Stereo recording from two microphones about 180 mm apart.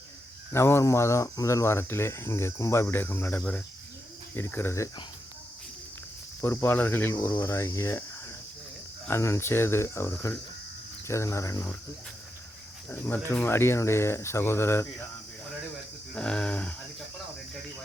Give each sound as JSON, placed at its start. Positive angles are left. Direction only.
{"t": 0.5, "sound": "speech", "side_deg": 15}
{"t": 6.4, "sound": "speech", "side_deg": 10}
{"t": 9.0, "sound": "speech", "side_deg": 15}
{"t": 12.9, "sound": "speech", "side_deg": 10}
{"t": 16.1, "sound": "speech", "side_deg": 5}